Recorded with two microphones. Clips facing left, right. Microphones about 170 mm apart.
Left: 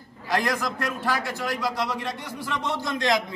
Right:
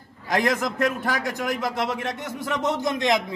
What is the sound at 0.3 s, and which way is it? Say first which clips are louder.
Speech: right 2 dB; 20° right (ahead or behind).